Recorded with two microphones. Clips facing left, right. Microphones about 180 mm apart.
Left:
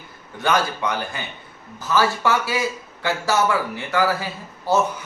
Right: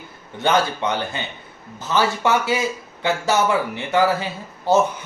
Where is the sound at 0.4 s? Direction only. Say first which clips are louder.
Right 2 dB; 25° right (ahead or behind).